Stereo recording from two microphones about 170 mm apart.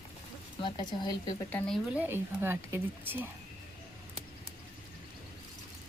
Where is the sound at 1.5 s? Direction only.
5° left (ahead or behind).